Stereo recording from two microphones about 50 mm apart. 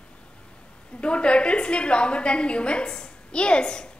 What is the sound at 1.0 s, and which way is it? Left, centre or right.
A woman's voice, left.